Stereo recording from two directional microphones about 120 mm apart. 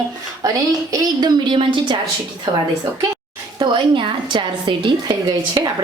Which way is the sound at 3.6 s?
40° right (ahead or behind).